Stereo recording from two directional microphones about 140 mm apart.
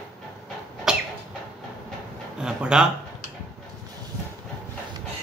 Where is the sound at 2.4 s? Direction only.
5° right (ahead or behind).